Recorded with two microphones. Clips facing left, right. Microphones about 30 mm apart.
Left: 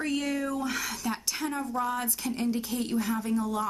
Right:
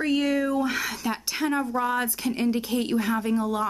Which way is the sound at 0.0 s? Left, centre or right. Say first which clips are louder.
Right 6 dB; centre.